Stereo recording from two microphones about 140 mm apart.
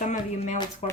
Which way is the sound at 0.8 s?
50° left (ahead or behind).